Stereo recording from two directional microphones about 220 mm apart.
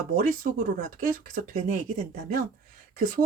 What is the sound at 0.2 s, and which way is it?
Speech, 40° right (ahead or behind).